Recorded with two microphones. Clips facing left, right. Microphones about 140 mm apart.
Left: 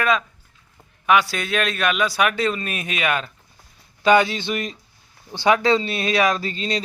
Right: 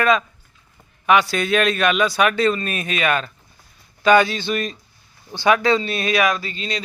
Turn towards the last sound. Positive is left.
turn(degrees=35)  # may be behind; listen again after turning